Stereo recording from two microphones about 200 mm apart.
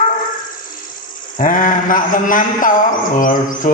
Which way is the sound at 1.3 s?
40° left (ahead or behind).